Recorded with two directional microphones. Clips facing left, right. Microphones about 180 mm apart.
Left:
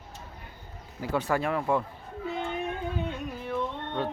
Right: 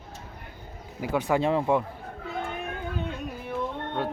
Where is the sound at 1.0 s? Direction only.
15° right (ahead or behind).